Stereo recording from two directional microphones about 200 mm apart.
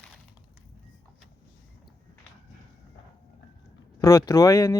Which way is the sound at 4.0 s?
15° left (ahead or behind).